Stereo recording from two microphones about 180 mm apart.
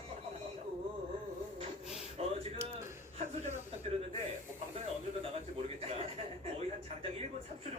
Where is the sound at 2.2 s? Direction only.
35° right (ahead or behind).